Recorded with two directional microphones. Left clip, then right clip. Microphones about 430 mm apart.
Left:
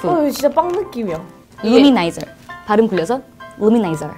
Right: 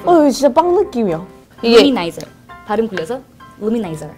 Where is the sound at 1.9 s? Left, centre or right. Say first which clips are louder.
Left 3 dB; centre.